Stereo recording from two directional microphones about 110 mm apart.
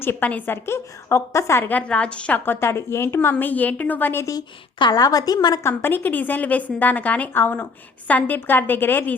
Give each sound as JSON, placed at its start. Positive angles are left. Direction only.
{"t": 0.0, "sound": "a woman's voice", "side_deg": 20}
{"t": 4.3, "sound": "a woman's voice", "side_deg": 40}
{"t": 5.6, "sound": "a woman's voice", "side_deg": 20}